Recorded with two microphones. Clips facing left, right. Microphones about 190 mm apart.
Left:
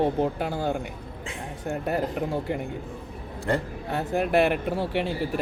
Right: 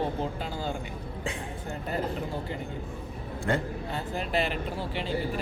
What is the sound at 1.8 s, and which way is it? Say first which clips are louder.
Speech: left 4 dB; 60° left (ahead or behind).